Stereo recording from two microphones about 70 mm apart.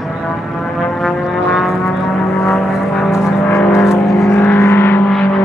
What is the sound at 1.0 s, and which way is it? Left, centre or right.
Music, centre.